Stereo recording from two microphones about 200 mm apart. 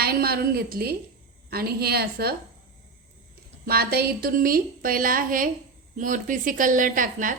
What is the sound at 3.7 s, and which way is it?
A woman's voice, 50° right (ahead or behind).